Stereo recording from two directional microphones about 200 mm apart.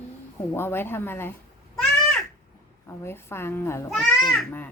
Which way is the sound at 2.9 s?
10° left (ahead or behind).